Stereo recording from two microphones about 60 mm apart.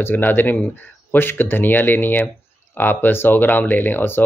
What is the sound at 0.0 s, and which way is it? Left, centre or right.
Speech, left.